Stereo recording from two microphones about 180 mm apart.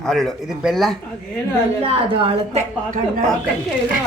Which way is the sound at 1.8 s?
30° right (ahead or behind).